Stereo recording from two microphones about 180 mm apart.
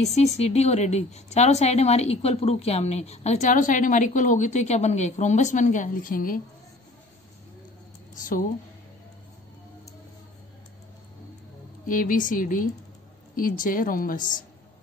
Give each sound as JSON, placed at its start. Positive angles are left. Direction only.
{"t": 0.0, "sound": "a woman's voice", "side_deg": 35}
{"t": 8.1, "sound": "a woman's voice", "side_deg": 45}
{"t": 11.8, "sound": "a woman's voice", "side_deg": 50}